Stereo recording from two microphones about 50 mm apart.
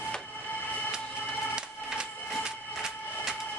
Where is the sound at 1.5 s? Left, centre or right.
Centre.